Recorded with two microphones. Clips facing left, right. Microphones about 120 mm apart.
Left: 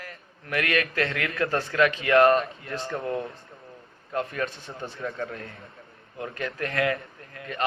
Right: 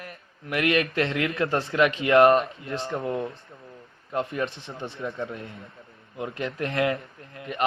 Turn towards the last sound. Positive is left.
turn(degrees=-20)  # may be behind; listen again after turning